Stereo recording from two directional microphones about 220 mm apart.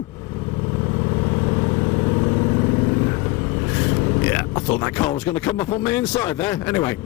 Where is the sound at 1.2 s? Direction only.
20° left (ahead or behind).